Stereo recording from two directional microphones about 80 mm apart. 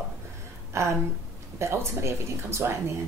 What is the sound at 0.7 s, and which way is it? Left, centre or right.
Speech, right.